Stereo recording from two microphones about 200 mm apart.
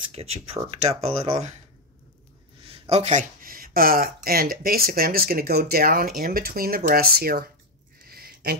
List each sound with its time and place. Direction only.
0.1 s speech: 30° right (ahead or behind)
2.6 s speech: 30° right (ahead or behind); by 7.4 s 50° right (ahead or behind)
8.1 s a sound: 50° right (ahead or behind)